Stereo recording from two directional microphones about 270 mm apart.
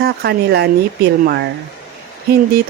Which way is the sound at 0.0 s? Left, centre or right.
Right.